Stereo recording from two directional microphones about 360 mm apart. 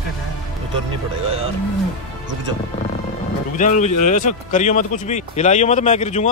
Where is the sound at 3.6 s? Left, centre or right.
Left.